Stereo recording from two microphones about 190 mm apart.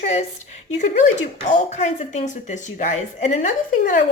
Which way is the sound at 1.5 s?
35° left (ahead or behind).